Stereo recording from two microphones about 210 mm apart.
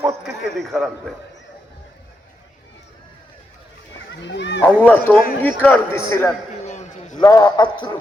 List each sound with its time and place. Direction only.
0.3 s a man's voice: centre (ahead or behind)
4.3 s speech: 55° left (ahead or behind)
4.6 s a man's voice: 10° left (ahead or behind)
6.7 s a sound: 35° left (ahead or behind)
7.2 s a man's voice: 20° left (ahead or behind)